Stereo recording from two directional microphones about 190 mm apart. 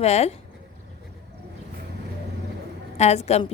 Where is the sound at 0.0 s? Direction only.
35° left (ahead or behind).